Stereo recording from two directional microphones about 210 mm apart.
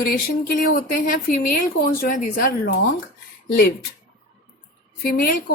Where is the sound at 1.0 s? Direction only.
40° left (ahead or behind).